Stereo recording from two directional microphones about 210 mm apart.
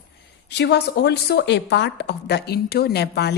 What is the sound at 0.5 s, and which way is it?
Speech, 55° left (ahead or behind).